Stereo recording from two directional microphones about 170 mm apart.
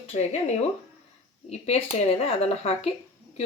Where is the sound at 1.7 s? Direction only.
35° left (ahead or behind).